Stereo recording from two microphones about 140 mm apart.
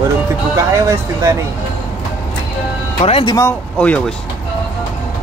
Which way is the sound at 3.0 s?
40° left (ahead or behind).